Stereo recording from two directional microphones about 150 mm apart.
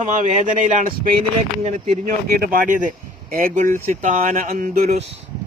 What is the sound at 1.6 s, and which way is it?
Speech, 50° right (ahead or behind).